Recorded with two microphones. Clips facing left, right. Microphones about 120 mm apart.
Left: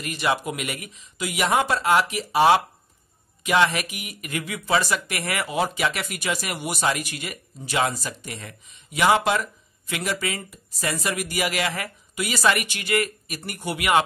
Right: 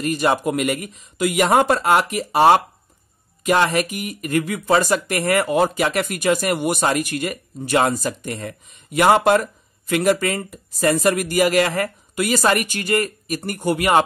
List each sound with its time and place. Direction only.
0.0 s speech: 45° right (ahead or behind)